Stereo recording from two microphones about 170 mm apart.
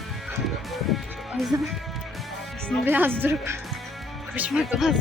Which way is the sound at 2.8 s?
10° right (ahead or behind).